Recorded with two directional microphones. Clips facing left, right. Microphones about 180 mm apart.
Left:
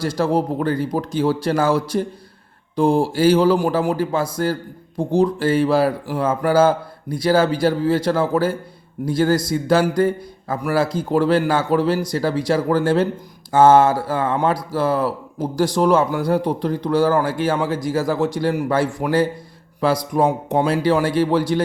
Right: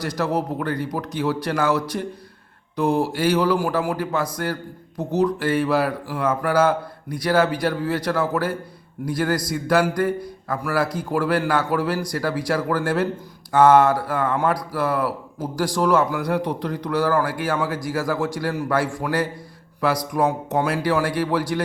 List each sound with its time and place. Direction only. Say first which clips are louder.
0.0 s a man's voice: left 4 dB; 30° left (ahead or behind)